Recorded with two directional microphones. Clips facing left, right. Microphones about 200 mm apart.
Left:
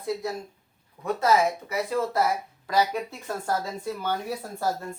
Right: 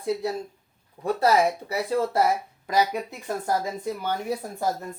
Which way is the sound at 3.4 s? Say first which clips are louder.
Right 2 dB; 15° right (ahead or behind).